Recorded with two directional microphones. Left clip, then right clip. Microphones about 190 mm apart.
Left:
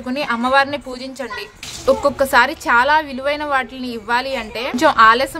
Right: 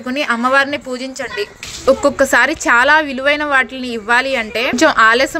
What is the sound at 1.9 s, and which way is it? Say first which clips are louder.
A woman's voice: right 3 dB; 20° right (ahead or behind).